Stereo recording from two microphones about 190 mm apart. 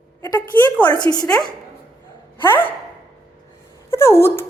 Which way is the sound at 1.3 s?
5° left (ahead or behind).